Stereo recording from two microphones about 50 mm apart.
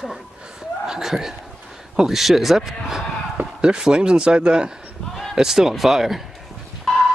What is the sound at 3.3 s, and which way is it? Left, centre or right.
Speech, centre.